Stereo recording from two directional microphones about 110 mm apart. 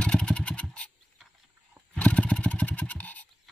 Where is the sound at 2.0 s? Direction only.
10° left (ahead or behind).